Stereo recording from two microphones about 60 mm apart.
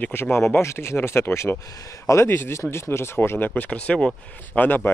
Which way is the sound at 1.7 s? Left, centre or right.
Left.